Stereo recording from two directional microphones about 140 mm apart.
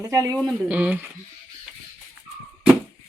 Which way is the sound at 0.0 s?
25° right (ahead or behind).